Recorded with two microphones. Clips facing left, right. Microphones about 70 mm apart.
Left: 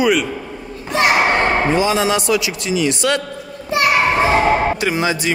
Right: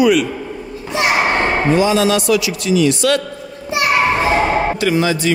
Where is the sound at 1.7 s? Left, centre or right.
Left.